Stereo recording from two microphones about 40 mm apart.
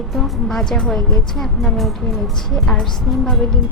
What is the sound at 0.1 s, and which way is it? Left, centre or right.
Speech, centre.